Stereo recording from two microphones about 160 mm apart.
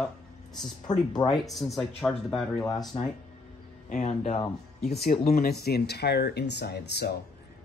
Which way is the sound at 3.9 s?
45° left (ahead or behind).